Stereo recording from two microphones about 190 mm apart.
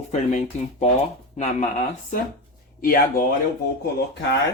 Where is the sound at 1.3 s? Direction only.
35° left (ahead or behind).